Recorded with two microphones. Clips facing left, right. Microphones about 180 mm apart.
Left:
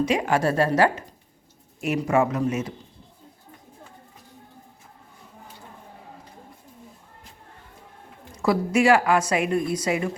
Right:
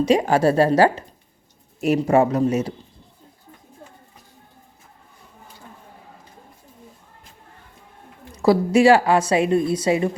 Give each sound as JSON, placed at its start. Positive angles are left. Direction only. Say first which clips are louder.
{"t": 0.0, "sound": "a woman's voice", "louder": "right 5 dB", "side_deg": -35}
{"t": 8.4, "sound": "a woman's voice", "louder": "right 5 dB", "side_deg": -35}